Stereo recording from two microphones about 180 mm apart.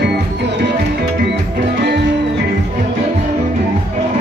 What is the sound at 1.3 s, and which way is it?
Music, 70° right (ahead or behind).